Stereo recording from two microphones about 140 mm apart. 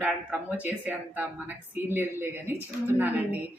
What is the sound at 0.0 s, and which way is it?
Speech, 10° right (ahead or behind).